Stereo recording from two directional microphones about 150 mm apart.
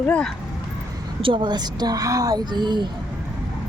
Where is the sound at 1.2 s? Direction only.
35° right (ahead or behind).